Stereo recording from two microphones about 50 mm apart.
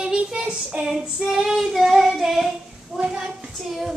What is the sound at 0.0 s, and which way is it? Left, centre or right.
Child singing, centre.